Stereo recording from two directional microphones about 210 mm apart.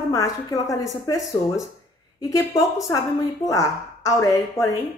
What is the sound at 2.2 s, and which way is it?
A woman's voice, 15° left (ahead or behind).